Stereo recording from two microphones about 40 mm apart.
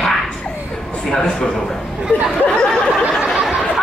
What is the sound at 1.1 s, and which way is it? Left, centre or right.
Speech, centre.